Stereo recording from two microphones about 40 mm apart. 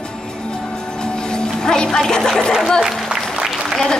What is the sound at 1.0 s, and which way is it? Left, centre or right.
Music, centre.